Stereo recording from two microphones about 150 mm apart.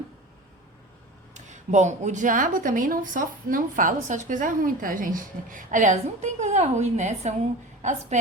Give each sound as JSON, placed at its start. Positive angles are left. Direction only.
{"t": 1.3, "sound": "a woman's voice", "side_deg": -50}